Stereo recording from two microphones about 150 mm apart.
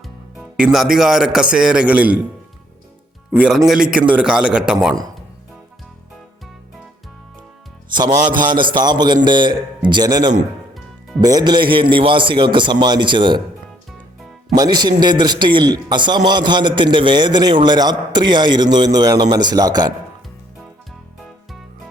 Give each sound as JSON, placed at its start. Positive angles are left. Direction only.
{"t": 0.3, "sound": "a man's voice", "side_deg": -5}
{"t": 3.3, "sound": "a man's voice", "side_deg": -5}
{"t": 7.9, "sound": "a man's voice", "side_deg": -25}
{"t": 14.5, "sound": "a man's voice", "side_deg": -25}